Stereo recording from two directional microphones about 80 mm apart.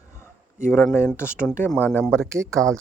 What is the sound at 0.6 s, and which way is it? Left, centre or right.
Speech, left.